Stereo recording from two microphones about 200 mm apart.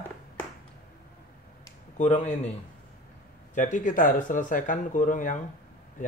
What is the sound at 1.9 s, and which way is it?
Speech, 35° left (ahead or behind).